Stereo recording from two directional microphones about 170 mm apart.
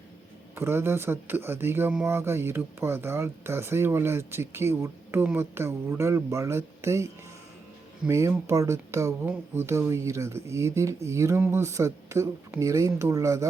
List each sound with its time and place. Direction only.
0.5 s speech: 15° right (ahead or behind)